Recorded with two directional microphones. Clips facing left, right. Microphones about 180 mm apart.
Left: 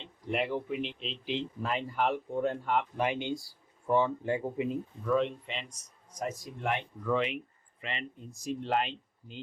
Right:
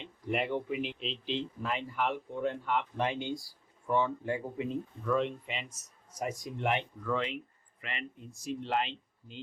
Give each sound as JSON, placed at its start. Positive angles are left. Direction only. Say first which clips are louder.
{"t": 0.3, "sound": "speech", "louder": "even", "side_deg": 0}
{"t": 1.2, "sound": "speech", "louder": "left 2 dB", "side_deg": 15}
{"t": 1.6, "sound": "speech", "louder": "left 4 dB", "side_deg": 40}
{"t": 3.0, "sound": "speech", "louder": "left 2 dB", "side_deg": 15}
{"t": 3.8, "sound": "speech", "louder": "left 3 dB", "side_deg": 30}
{"t": 7.0, "sound": "speech", "louder": "left 3 dB", "side_deg": 15}
{"t": 7.8, "sound": "speech", "louder": "left 3 dB", "side_deg": 25}
{"t": 8.3, "sound": "speech", "louder": "left 2 dB", "side_deg": 45}